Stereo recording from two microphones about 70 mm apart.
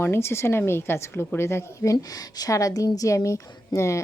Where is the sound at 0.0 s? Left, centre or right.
Left.